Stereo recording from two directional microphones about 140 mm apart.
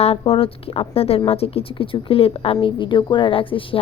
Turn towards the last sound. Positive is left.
turn(degrees=40)  # may be behind; listen again after turning